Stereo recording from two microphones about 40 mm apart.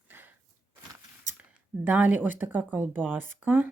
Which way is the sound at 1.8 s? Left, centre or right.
Right.